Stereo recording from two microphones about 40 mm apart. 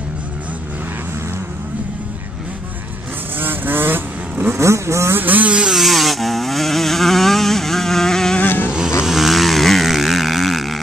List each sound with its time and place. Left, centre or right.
3.3 s vehicle: right
5.1 s vehicle: right
5.7 s vehicle: centre
8.5 s vehicle: left
9.0 s vehicle: centre